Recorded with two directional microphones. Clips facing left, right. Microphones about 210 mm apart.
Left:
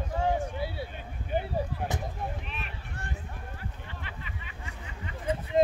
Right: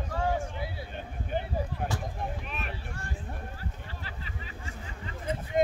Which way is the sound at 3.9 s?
35° right (ahead or behind).